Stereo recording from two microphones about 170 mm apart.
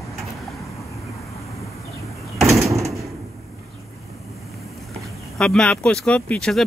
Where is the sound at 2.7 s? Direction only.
20° right (ahead or behind).